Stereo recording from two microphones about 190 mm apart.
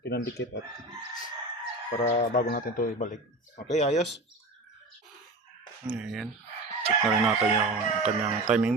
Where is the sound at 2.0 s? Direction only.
45° left (ahead or behind).